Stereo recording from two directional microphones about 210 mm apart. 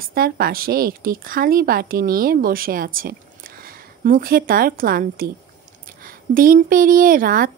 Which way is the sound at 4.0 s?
40° right (ahead or behind).